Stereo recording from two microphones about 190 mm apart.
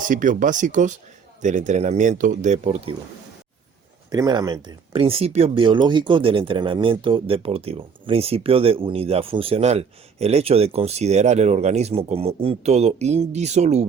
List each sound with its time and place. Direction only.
0.1 s speech: 45° right (ahead or behind)
4.1 s speech: 20° right (ahead or behind); by 13.8 s 35° right (ahead or behind)